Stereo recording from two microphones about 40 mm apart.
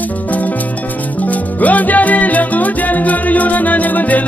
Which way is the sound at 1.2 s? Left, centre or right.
Left.